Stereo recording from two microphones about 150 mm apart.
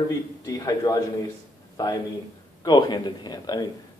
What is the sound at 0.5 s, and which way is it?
Speech, 25° left (ahead or behind).